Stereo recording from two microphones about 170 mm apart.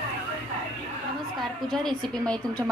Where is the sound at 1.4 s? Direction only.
Centre (ahead or behind).